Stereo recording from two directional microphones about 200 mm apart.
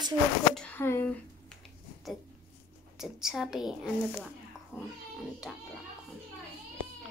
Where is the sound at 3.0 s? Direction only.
Centre (ahead or behind).